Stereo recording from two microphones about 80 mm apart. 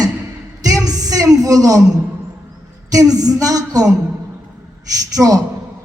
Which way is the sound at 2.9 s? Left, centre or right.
Right.